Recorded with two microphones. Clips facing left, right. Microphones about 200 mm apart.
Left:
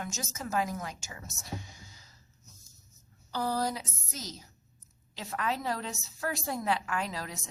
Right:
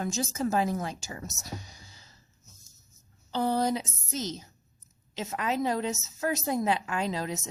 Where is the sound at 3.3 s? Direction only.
25° right (ahead or behind).